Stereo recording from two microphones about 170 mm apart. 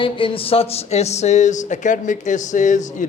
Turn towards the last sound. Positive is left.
turn(degrees=45)  # may be behind; listen again after turning